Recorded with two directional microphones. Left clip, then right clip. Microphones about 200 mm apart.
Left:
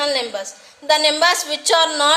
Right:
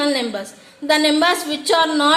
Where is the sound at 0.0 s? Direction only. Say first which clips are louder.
Even; 10° left (ahead or behind).